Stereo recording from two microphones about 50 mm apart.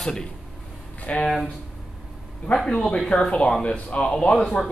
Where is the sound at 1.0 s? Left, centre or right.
Left.